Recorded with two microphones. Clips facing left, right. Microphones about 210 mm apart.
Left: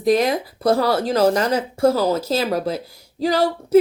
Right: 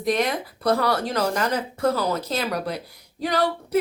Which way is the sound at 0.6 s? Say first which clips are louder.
Left 4 dB; 30° left (ahead or behind).